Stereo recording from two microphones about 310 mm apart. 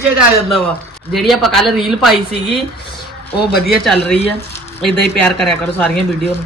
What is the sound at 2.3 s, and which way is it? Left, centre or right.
Speech, centre.